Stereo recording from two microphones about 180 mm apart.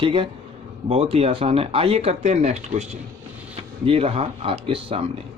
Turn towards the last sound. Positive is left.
turn(degrees=-30)  # may be behind; listen again after turning